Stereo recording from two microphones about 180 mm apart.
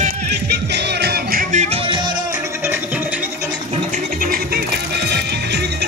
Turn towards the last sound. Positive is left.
turn(degrees=-65)  # may be behind; listen again after turning